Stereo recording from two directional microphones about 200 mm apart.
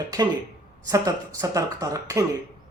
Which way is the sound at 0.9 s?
15° right (ahead or behind).